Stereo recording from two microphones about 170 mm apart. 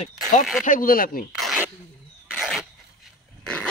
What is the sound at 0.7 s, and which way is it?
Speech, 55° left (ahead or behind).